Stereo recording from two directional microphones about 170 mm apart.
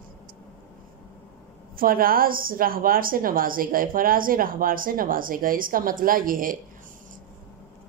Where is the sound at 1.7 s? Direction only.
55° right (ahead or behind).